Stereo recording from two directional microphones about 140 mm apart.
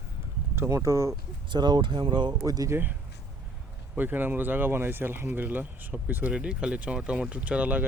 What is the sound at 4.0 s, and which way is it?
Speech, 15° right (ahead or behind).